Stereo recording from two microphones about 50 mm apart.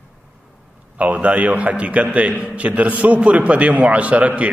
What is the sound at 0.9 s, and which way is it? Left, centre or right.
A man's voice, right.